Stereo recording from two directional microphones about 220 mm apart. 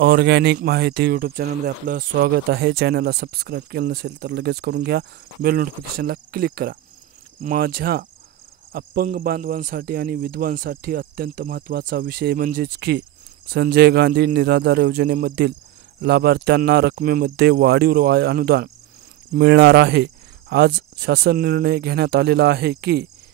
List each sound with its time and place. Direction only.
0.0 s speech: 50° right (ahead or behind)